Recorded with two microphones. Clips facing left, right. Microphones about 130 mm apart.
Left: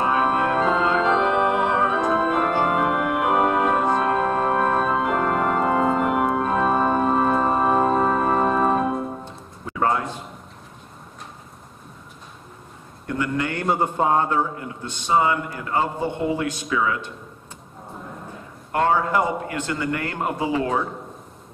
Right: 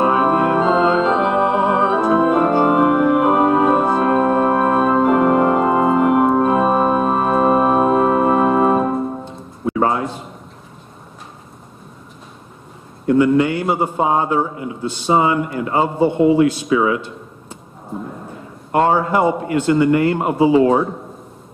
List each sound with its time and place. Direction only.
0.0 s organ: 30° right (ahead or behind)
1.3 s music: 25° right (ahead or behind)
1.9 s organ: 30° right (ahead or behind)
4.3 s music: 25° right (ahead or behind)
5.2 s organ: 20° right (ahead or behind)
9.7 s a sound: 25° right (ahead or behind)
13.0 s a sound: 20° right (ahead or behind)
13.5 s a man's voice: 10° right (ahead or behind)
15.0 s a man's voice: 25° right (ahead or behind)
18.7 s a man's voice: 25° right (ahead or behind)